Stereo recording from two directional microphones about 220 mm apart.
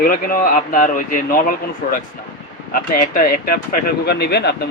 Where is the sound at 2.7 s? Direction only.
40° left (ahead or behind).